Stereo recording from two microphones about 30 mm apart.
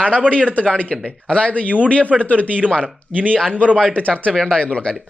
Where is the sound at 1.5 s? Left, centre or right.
Left.